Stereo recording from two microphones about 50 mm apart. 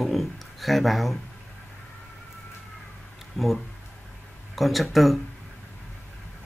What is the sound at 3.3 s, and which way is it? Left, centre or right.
Speech, centre.